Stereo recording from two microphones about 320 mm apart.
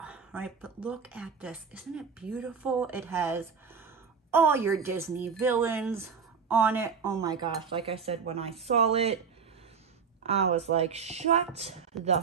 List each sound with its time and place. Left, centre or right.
0.0 s a sound: centre
0.8 s speech: centre
10.2 s speech: centre